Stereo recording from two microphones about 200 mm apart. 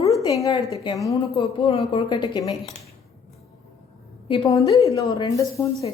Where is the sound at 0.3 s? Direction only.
15° left (ahead or behind).